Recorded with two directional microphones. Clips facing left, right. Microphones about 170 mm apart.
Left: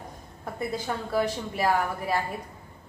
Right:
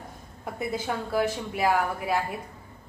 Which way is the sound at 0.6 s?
5° right (ahead or behind).